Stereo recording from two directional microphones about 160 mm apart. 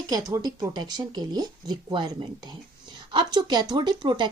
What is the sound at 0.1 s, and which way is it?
Speech, 25° right (ahead or behind).